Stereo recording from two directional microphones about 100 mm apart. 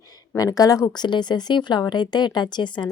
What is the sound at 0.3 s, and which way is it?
Speech, 35° left (ahead or behind).